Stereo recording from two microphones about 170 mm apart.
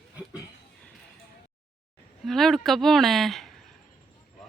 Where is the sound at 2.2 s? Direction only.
Centre (ahead or behind).